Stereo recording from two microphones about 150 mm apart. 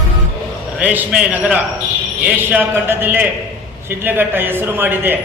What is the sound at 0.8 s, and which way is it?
A man's voice, 10° right (ahead or behind).